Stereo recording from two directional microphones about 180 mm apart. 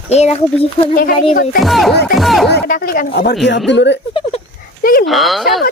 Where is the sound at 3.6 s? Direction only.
80° left.